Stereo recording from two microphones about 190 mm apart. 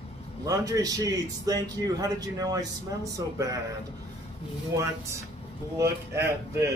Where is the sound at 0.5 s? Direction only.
20° right (ahead or behind).